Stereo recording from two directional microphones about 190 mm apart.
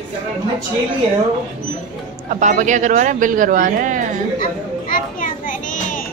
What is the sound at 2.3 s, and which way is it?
Speech, 40° right (ahead or behind).